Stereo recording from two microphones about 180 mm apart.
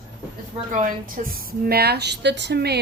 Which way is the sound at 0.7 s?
45° right (ahead or behind).